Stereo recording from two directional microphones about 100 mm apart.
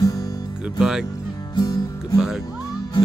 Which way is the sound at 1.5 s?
40° left (ahead or behind).